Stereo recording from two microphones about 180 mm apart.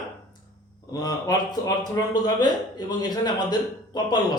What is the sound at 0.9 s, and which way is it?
Speech, 20° left (ahead or behind).